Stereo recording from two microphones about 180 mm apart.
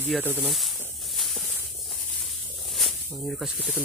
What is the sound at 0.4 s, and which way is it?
Speech, centre (ahead or behind).